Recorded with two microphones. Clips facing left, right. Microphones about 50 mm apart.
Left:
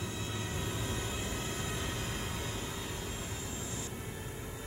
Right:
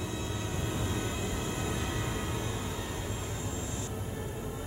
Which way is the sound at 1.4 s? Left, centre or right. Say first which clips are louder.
Right 4 dB; right.